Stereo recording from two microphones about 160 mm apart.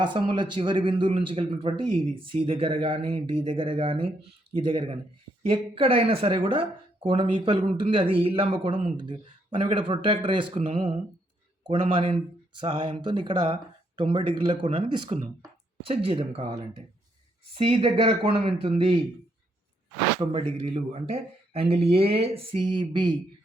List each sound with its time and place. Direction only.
0.0 s speech: 30° right (ahead or behind)
20.1 s speech: 35° right (ahead or behind)